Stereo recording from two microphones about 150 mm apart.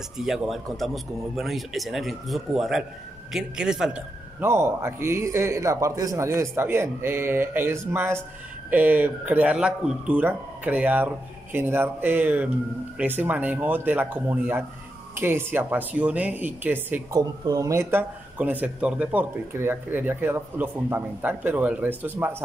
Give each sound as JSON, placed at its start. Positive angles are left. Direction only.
{"t": 0.2, "sound": "speech", "side_deg": 0}
{"t": 17.2, "sound": "speech", "side_deg": -25}